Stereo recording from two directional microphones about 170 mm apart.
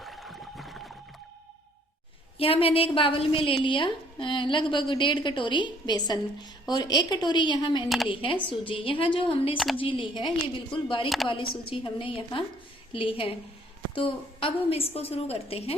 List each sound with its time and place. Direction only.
0.0 s boat: centre (ahead or behind)
2.4 s a woman's voice: 35° left (ahead or behind)
7.9 s speech: centre (ahead or behind)
8.1 s a woman's voice: 30° left (ahead or behind)